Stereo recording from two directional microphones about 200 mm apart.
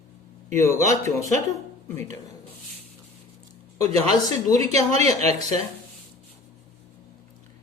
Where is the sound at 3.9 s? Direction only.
30° right (ahead or behind).